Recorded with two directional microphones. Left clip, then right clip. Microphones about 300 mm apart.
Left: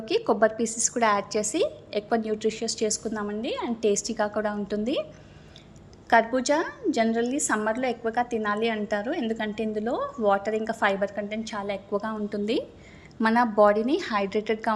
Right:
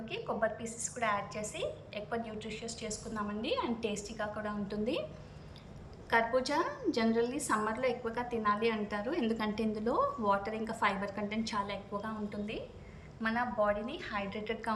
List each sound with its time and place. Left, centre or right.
0.0 s a woman's voice: centre
6.1 s a woman's voice: centre